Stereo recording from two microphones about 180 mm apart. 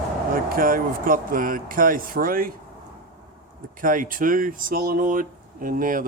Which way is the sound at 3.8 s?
50° right (ahead or behind).